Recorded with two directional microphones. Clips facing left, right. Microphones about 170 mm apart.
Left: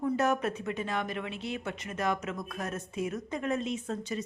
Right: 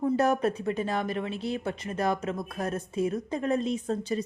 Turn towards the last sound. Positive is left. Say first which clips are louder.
# right 5 dB
turn(degrees=-35)  # may be behind; listen again after turning